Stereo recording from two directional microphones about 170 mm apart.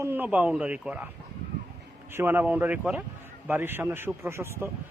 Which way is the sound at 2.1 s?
15° right (ahead or behind).